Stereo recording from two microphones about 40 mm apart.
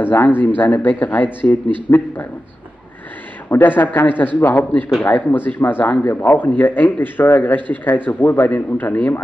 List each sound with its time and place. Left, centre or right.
0.0 s a man's voice: left
3.4 s a man's voice: left